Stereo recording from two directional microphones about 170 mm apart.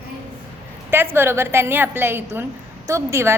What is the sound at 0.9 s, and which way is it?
A woman's voice, 15° right (ahead or behind).